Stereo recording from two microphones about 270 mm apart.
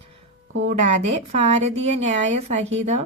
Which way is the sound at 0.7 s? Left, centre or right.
Right.